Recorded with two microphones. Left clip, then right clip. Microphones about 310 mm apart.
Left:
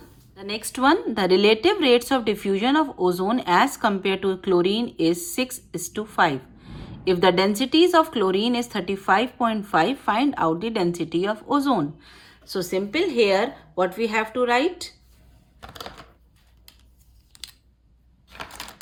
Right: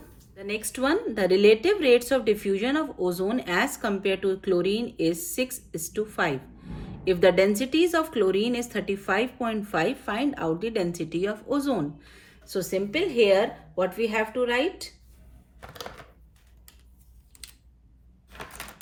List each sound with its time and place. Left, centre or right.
0.3 s a woman's voice: centre